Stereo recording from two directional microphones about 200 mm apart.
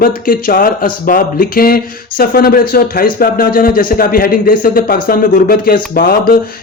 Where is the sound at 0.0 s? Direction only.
45° left (ahead or behind).